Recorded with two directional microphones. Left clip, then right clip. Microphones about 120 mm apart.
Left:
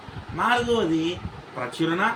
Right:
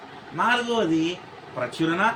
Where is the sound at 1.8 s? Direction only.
15° right (ahead or behind).